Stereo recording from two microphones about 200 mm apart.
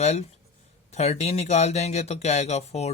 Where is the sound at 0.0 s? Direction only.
35° left (ahead or behind).